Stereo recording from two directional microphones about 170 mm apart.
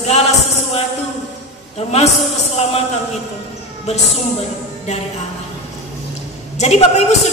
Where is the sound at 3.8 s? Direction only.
40° left (ahead or behind).